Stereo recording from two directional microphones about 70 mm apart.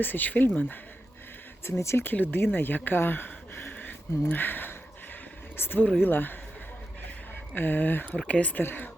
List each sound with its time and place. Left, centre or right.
0.0 s speech: left
1.6 s speech: left
7.5 s speech: left